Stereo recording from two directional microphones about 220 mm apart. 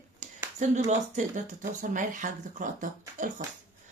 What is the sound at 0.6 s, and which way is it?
Speech, 35° right (ahead or behind).